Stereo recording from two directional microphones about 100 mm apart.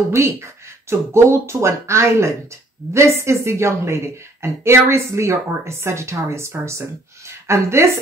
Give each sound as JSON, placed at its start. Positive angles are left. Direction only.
{"t": 0.8, "sound": "a woman's voice", "side_deg": -25}